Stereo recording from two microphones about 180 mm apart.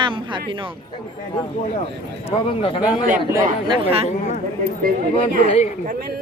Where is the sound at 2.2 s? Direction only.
30° left (ahead or behind).